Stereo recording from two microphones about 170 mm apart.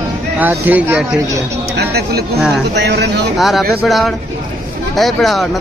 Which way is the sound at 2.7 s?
85° right.